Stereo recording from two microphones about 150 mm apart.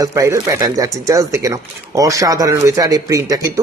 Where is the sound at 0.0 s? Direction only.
20° right (ahead or behind).